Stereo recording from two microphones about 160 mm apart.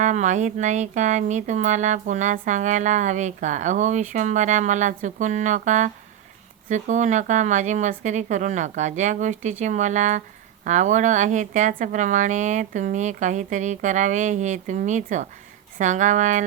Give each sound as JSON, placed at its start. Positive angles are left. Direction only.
{"t": 0.0, "sound": "speech", "side_deg": -50}